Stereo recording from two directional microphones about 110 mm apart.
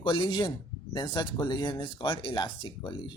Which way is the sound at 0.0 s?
50° left (ahead or behind).